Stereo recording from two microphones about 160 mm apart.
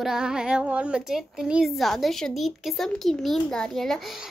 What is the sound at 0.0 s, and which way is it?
Speech, 5° right (ahead or behind).